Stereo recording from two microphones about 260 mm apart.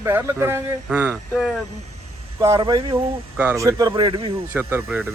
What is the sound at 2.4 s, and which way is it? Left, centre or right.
Speech, centre.